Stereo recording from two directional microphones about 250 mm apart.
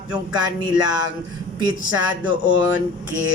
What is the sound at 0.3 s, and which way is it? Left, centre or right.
Speech, centre.